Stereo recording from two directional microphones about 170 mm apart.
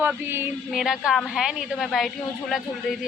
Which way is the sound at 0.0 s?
10° right (ahead or behind).